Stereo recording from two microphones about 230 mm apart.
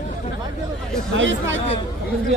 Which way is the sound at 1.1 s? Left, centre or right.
Right.